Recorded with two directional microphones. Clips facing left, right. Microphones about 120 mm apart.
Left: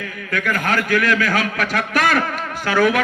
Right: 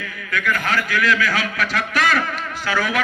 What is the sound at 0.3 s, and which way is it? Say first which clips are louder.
A man's voice: left 1 dB; 45° left (ahead or behind).